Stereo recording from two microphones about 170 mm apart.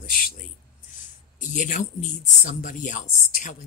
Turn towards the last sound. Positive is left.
turn(degrees=50)  # may be behind; listen again after turning